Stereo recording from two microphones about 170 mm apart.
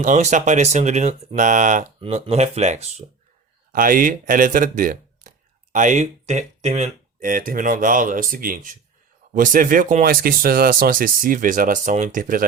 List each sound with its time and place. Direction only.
0.0 s speech: 45° right (ahead or behind)
3.7 s speech: 55° right (ahead or behind)